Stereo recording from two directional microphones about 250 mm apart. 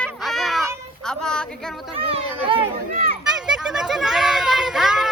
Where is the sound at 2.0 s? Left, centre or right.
Right.